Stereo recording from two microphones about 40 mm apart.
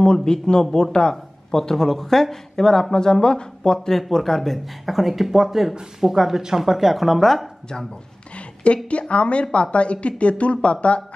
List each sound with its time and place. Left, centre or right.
0.0 s speech: left
4.1 s speech: centre
7.2 s speech: centre
8.6 s speech: left